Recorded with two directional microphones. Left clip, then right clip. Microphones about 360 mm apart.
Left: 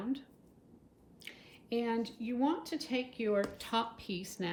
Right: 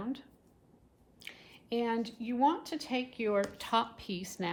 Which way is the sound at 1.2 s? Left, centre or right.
Centre.